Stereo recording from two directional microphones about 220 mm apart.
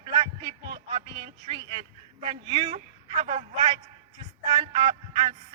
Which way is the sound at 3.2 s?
30° right (ahead or behind).